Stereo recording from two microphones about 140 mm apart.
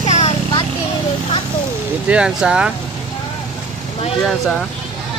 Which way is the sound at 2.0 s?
5° right (ahead or behind).